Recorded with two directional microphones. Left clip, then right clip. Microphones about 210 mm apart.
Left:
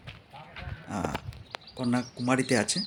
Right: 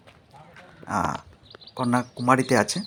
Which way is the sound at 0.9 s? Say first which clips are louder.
Right 8 dB; 5° right (ahead or behind).